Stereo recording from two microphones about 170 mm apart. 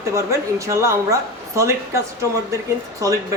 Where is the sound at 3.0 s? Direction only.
20° right (ahead or behind).